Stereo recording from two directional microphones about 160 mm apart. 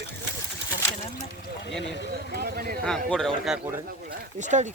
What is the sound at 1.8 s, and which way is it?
Speech, 90° left.